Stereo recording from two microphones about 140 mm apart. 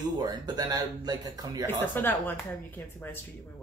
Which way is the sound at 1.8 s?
15° left (ahead or behind).